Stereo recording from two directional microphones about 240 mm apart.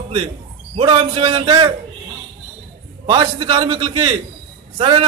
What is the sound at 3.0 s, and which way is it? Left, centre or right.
A man's voice, centre.